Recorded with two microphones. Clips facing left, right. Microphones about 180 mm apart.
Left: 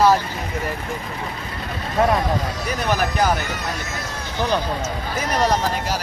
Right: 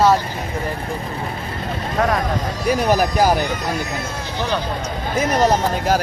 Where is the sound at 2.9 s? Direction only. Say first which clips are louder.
Right 2 dB; 40° right (ahead or behind).